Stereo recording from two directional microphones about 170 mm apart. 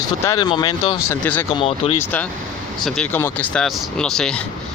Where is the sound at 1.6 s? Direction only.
35° left (ahead or behind).